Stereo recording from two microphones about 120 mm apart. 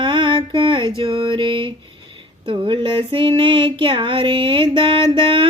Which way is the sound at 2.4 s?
45° right (ahead or behind).